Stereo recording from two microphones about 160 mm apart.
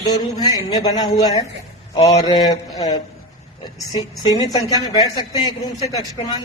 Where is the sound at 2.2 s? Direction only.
25° left (ahead or behind).